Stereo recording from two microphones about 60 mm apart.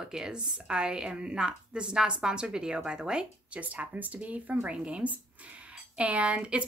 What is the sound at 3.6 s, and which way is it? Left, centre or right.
Speech, right.